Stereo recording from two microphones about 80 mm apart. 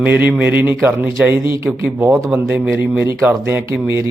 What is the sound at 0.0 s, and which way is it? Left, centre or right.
Speech, right.